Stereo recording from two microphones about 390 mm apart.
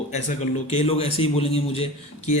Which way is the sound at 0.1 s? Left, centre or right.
Centre.